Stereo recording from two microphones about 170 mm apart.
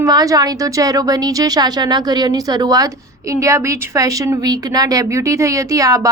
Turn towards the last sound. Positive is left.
turn(degrees=-20)  # may be behind; listen again after turning